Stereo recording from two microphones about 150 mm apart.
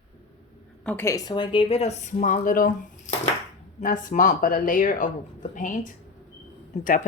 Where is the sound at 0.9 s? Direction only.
15° left (ahead or behind); by 2.6 s 65° left (ahead or behind).